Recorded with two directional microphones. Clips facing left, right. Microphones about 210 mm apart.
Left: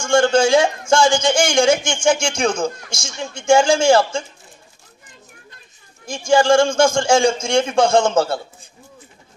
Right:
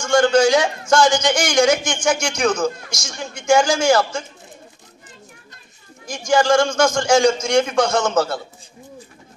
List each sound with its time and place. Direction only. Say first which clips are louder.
0.0 s a man's voice: even; 25° left (ahead or behind)
6.0 s a man's voice: left 2 dB; 25° left (ahead or behind)